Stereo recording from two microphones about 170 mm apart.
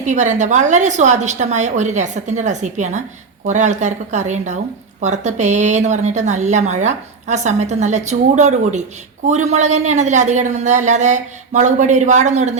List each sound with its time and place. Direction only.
0.0 s speech: 45° right (ahead or behind)